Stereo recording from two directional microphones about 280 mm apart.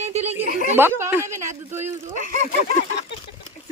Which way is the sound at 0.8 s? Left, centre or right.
Centre.